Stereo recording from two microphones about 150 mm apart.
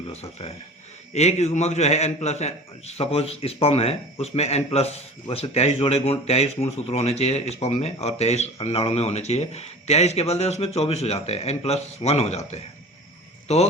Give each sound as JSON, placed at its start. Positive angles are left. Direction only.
{"t": 0.1, "sound": "speech", "side_deg": 45}